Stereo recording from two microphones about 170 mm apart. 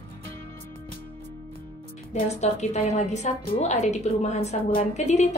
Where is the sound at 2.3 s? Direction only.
40° left (ahead or behind).